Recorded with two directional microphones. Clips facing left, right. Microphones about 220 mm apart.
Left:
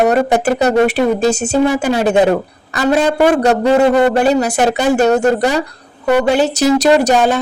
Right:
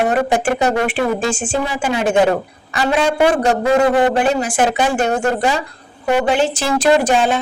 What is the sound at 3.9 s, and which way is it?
Speech, 40° left (ahead or behind).